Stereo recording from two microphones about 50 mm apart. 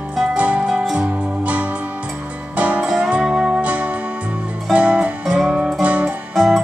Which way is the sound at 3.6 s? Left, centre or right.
Right.